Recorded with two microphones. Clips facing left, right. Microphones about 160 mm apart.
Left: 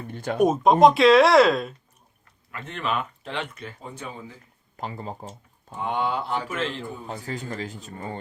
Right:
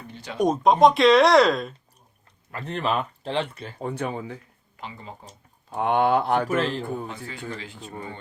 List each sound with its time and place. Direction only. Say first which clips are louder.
0.1 s speech: left 4 dB; 50° left (ahead or behind)
0.4 s speech: left 1 dB; 5° left (ahead or behind)
2.5 s speech: right 3 dB; 35° right (ahead or behind)
3.8 s speech: right 11 dB; 65° right (ahead or behind)
4.8 s speech: left 6 dB; 40° left (ahead or behind)
5.7 s speech: right 6 dB; 60° right (ahead or behind)
6.5 s speech: right 5 dB; 40° right (ahead or behind)
7.1 s speech: left 2 dB; 40° left (ahead or behind)